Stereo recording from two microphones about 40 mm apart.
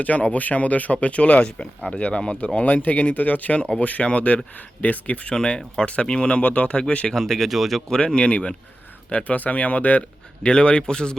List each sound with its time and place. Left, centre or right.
0.0 s speech: left
5.8 s a man's voice: left
7.1 s speech: centre
7.5 s speech: centre
7.9 s a man's voice: left
10.4 s a man's voice: left